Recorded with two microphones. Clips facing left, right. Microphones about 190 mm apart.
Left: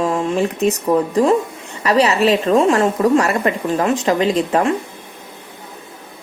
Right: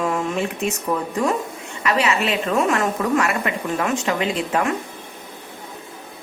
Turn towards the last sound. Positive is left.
turn(degrees=35)  # may be behind; listen again after turning